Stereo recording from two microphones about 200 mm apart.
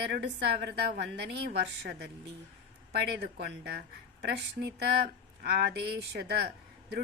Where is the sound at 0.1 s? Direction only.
55° right (ahead or behind).